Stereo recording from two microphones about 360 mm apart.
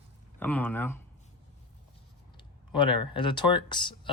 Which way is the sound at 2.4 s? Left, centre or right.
Centre.